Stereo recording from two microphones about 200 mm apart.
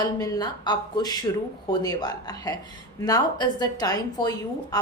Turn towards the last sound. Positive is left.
turn(degrees=20)  # may be behind; listen again after turning